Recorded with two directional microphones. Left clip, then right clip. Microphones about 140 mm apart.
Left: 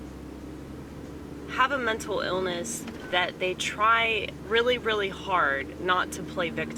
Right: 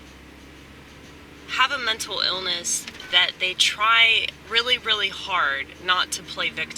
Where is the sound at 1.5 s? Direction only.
25° right (ahead or behind).